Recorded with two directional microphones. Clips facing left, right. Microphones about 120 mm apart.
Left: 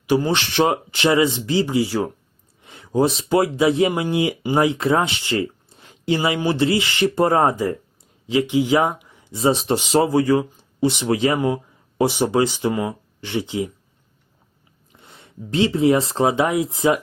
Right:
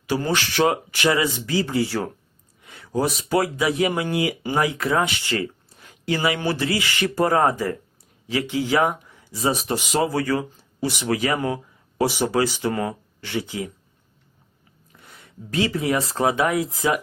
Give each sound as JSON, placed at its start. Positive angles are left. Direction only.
{"t": 0.0, "sound": "speech", "side_deg": 20}
{"t": 10.1, "sound": "speech", "side_deg": 20}
{"t": 14.9, "sound": "speech", "side_deg": 25}